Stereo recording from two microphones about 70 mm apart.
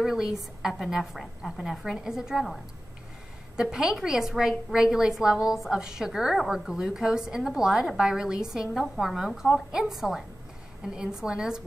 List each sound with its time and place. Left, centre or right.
0.0 s a woman's voice: centre